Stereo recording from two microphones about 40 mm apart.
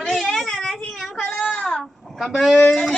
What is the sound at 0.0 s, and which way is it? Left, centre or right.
Whimper, centre.